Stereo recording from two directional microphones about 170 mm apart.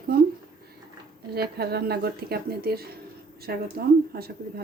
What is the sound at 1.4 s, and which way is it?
A woman's voice, 70° right (ahead or behind).